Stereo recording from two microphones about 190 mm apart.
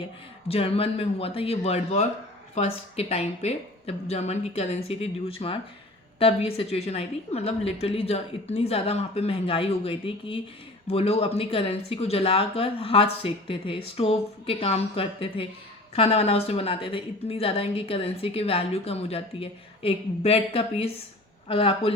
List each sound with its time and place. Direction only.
0.0 s a woman's voice: 30° left (ahead or behind)